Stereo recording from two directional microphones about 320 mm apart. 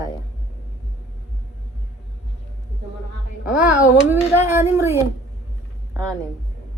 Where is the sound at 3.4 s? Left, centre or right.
Centre.